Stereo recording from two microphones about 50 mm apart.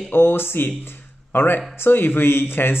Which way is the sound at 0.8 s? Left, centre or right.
Left.